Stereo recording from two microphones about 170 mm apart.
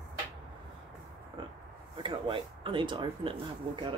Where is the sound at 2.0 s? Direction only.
30° right (ahead or behind).